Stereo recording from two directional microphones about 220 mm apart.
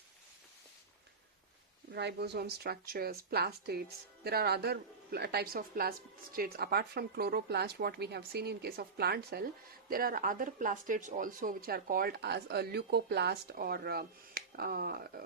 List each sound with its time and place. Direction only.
1.9 s speech: 50° right (ahead or behind)